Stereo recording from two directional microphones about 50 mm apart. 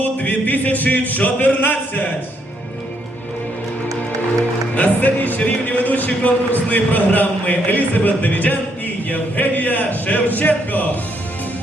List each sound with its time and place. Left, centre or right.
0.0 s music: left
4.7 s a man's voice: left